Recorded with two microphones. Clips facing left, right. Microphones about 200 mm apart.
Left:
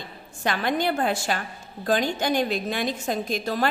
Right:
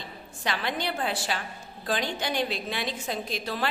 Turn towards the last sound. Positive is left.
turn(degrees=45)  # may be behind; listen again after turning